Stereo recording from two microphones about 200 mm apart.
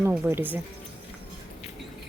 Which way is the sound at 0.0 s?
10° right (ahead or behind).